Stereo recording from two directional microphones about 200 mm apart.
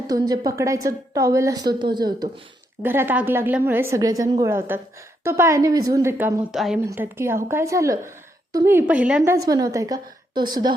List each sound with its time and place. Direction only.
0.1 s a woman's voice: 20° right (ahead or behind)
2.8 s a woman's voice: 10° right (ahead or behind)
9.3 s a woman's voice: 15° right (ahead or behind)